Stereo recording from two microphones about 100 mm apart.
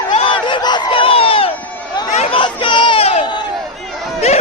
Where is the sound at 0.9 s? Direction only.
65° left (ahead or behind).